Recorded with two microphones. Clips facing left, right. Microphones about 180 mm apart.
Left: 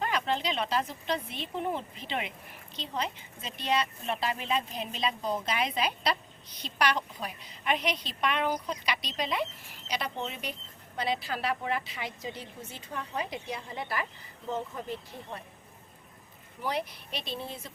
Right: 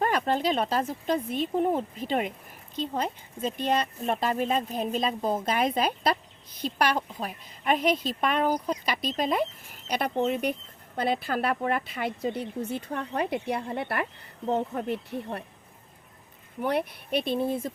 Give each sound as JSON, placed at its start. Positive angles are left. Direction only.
{"t": 0.0, "sound": "speech", "side_deg": -50}
{"t": 16.6, "sound": "speech", "side_deg": -55}